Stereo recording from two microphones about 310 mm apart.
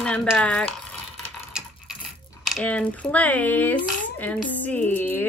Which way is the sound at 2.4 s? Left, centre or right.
Centre.